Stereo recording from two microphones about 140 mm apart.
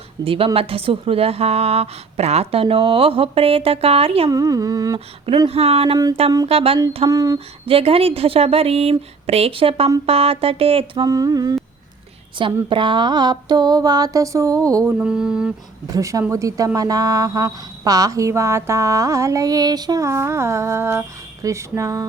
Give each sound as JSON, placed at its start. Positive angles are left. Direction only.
{"t": 0.3, "sound": "a woman's voice", "side_deg": -40}
{"t": 4.3, "sound": "speech", "side_deg": -25}
{"t": 4.9, "sound": "a woman's voice", "side_deg": -45}
{"t": 7.1, "sound": "speech", "side_deg": -25}
{"t": 7.3, "sound": "a woman's voice", "side_deg": -45}
{"t": 11.0, "sound": "speech", "side_deg": -25}
{"t": 12.6, "sound": "speech", "side_deg": -35}
{"t": 14.9, "sound": "mantra", "side_deg": -5}
{"t": 15.9, "sound": "speech", "side_deg": -25}